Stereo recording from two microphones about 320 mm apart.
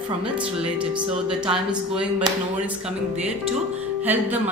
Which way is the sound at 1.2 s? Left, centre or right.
Centre.